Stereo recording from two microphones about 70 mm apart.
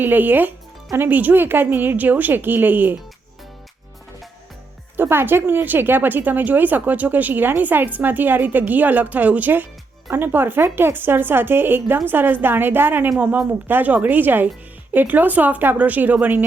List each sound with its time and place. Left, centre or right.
0.0 s speech: right
4.9 s speech: right